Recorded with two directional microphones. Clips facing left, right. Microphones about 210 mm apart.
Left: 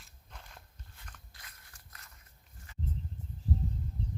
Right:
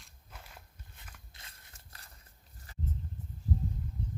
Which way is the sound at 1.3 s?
25° right (ahead or behind).